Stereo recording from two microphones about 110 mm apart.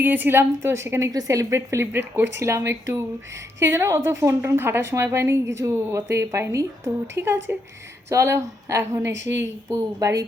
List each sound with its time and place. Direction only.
0.0 s a woman's voice: 15° right (ahead or behind)